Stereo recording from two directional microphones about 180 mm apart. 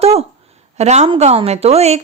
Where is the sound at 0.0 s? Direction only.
35° right (ahead or behind).